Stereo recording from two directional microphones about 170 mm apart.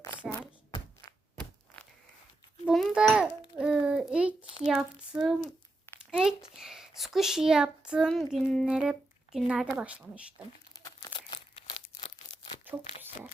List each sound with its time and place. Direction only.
0.2 s hands: centre (ahead or behind)
1.4 s a sound: 5° left (ahead or behind)
2.6 s a child's voice: 5° right (ahead or behind)
5.4 s a sound: 15° left (ahead or behind)
6.1 s a child's voice: 5° right (ahead or behind)
11.0 s crumpling: 30° left (ahead or behind)